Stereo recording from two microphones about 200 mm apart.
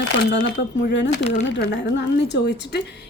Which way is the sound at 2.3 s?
60° left (ahead or behind).